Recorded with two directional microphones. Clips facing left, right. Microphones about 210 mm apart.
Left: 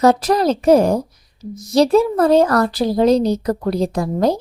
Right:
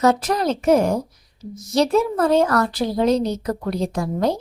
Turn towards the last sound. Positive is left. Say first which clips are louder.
# left 4 dB
turn(degrees=35)  # may be behind; listen again after turning